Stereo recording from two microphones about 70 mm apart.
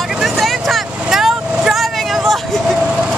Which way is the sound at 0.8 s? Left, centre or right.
Centre.